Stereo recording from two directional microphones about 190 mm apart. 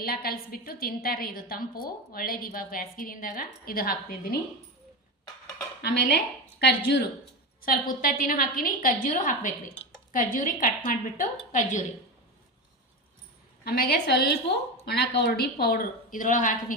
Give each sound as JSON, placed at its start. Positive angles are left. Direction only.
{"t": 0.0, "sound": "a woman's voice", "side_deg": 50}
{"t": 5.8, "sound": "a woman's voice", "side_deg": 60}
{"t": 13.7, "sound": "a woman's voice", "side_deg": 55}